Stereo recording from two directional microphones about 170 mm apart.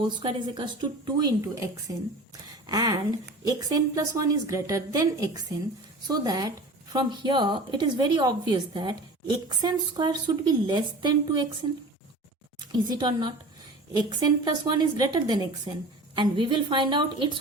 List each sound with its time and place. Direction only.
0.0 s a woman's voice: 30° right (ahead or behind)
12.5 s a woman's voice: 25° right (ahead or behind)